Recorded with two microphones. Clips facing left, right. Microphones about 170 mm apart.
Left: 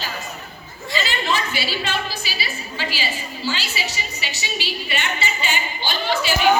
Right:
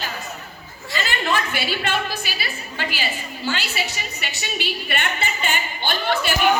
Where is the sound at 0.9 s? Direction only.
55° right (ahead or behind).